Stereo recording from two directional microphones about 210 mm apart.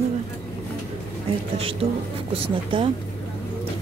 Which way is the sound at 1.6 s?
25° right (ahead or behind).